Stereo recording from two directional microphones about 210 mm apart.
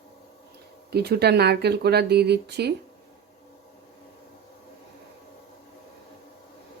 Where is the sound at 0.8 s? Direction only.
50° right (ahead or behind).